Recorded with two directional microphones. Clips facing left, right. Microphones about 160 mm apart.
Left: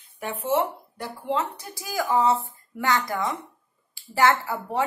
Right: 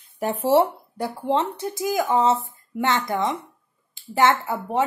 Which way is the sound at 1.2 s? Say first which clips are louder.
Right 4 dB; 25° right (ahead or behind).